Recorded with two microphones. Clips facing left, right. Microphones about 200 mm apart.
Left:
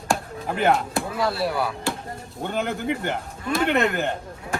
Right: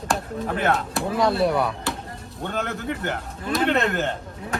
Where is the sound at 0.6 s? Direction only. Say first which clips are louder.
Left 3 dB; centre (ahead or behind).